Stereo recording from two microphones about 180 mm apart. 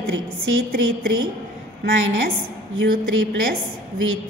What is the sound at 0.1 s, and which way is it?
Speech, 90° right.